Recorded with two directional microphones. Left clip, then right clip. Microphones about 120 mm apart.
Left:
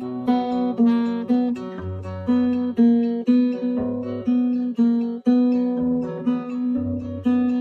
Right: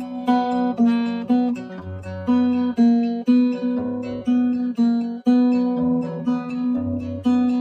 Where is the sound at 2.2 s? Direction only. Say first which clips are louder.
Right 2 dB; 25° right (ahead or behind).